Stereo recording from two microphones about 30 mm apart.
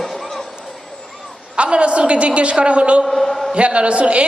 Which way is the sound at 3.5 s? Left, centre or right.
Right.